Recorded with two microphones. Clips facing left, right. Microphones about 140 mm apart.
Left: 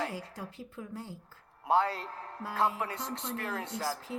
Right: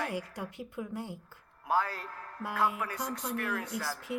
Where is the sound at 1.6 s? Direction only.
25° left (ahead or behind).